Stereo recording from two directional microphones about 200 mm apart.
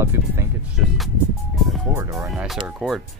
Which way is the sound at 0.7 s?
Centre (ahead or behind).